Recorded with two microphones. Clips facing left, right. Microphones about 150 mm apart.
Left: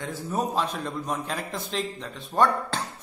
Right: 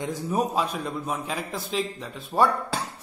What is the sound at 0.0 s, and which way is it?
A man's voice, 15° right (ahead or behind).